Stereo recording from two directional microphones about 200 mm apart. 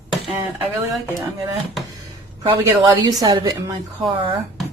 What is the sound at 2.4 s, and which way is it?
A woman's voice, 25° right (ahead or behind).